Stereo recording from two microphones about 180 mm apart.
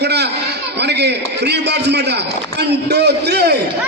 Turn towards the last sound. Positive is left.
turn(degrees=-65)  # may be behind; listen again after turning